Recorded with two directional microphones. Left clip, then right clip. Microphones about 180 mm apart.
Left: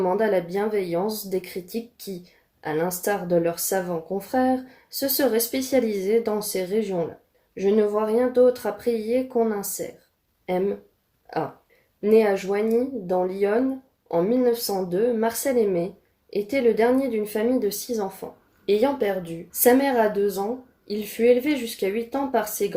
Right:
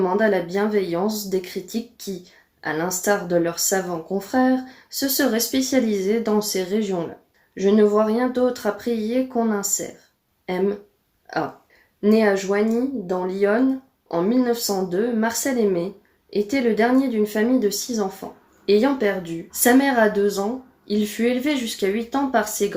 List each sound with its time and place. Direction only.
0.0 s speech: 35° left (ahead or behind)
12.0 s speech: 35° left (ahead or behind)
18.2 s speech: 25° left (ahead or behind)
18.6 s speech: 35° left (ahead or behind)